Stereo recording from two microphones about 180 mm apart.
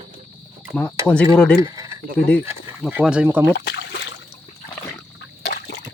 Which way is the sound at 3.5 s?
75° left (ahead or behind).